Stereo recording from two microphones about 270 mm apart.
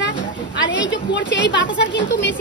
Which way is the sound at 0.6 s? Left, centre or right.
Left.